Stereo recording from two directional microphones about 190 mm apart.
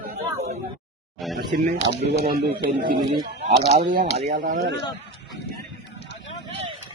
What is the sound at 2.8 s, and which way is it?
Speech, 50° right (ahead or behind).